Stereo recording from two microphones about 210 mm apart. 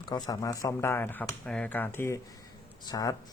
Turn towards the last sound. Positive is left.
turn(degrees=20)  # may be behind; listen again after turning